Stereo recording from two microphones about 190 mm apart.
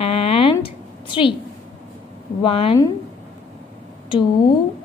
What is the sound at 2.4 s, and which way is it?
Speech, 30° left (ahead or behind).